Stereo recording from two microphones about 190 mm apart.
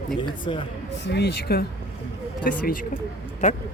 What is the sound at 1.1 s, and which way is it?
Speech, 60° left (ahead or behind).